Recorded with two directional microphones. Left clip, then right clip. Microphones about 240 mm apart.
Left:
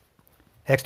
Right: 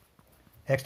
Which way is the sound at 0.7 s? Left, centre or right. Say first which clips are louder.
Left 6 dB; left.